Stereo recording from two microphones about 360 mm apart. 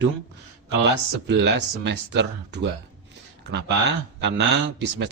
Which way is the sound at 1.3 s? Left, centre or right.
Right.